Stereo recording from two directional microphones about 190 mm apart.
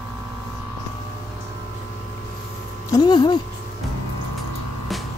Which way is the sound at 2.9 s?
20° left (ahead or behind).